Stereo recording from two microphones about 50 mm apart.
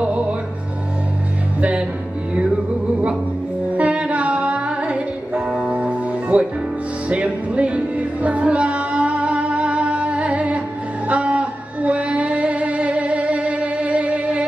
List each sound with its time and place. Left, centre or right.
1.6 s music: right
3.7 s music: right
11.1 s a sound: right